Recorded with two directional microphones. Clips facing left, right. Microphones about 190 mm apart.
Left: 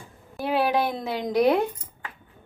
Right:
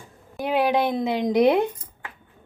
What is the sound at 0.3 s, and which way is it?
Speech, 15° right (ahead or behind).